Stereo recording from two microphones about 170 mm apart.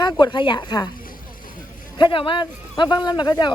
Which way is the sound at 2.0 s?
30° left (ahead or behind).